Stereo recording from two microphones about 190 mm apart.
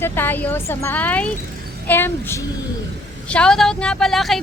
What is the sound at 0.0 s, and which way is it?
Speech, 10° left (ahead or behind).